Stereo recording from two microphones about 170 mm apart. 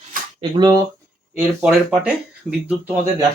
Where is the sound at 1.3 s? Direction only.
5° right (ahead or behind).